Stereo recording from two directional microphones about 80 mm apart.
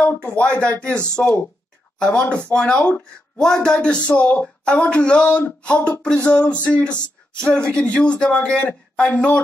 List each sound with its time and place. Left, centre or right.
0.0 s speech: left
1.2 s speech: left
2.0 s speech: centre